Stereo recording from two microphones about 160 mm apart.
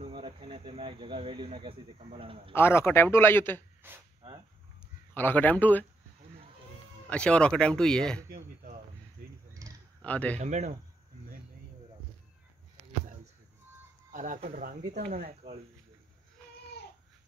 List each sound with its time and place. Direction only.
0.0 s speech: 30° right (ahead or behind)
2.5 s speech: 15° left (ahead or behind)
3.8 s speech: 15° right (ahead or behind)
5.1 s speech: 10° left (ahead or behind)
7.1 s speech: 5° left (ahead or behind)
9.5 s a sound: 20° right (ahead or behind)
10.0 s speech: 10° left (ahead or behind)
10.4 s speech: 45° right (ahead or behind)
14.1 s speech: 55° right (ahead or behind); by 15.3 s 75° right (ahead or behind)